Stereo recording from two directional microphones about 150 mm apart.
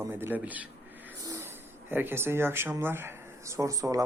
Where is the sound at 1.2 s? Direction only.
25° right (ahead or behind).